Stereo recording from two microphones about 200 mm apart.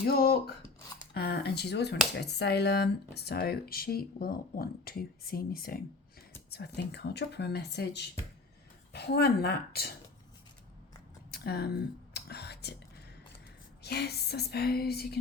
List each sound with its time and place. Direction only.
0.0 s speech: 50° left (ahead or behind)
11.3 s a sound: 55° left (ahead or behind)
12.1 s whispering: 55° left (ahead or behind)
13.8 s speech: 55° left (ahead or behind)